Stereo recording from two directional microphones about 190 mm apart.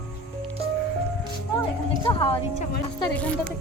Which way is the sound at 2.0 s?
30° left (ahead or behind).